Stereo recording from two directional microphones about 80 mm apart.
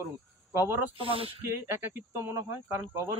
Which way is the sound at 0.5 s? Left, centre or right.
Right.